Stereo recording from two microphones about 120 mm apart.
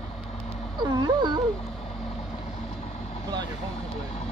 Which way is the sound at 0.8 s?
35° right (ahead or behind).